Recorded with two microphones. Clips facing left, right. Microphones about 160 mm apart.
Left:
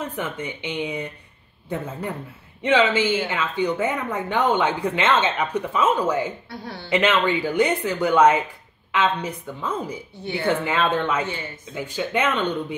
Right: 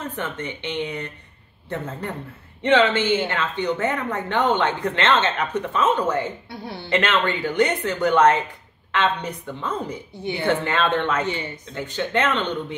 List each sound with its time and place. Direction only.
0.1 s speech: 10° left (ahead or behind)
11.2 s a woman's voice: 20° right (ahead or behind)
11.7 s speech: 10° left (ahead or behind)